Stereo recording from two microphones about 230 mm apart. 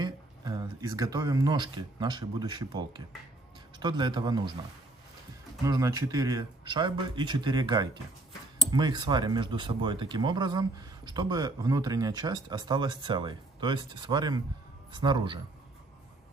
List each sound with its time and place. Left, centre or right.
0.0 s speech: centre
5.7 s speech: centre